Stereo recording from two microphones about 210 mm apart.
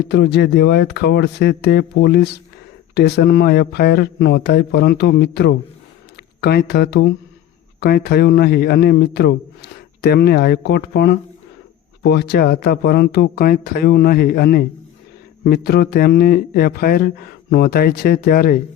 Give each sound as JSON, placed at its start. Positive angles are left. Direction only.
{"t": 0.1, "sound": "a man's voice", "side_deg": 55}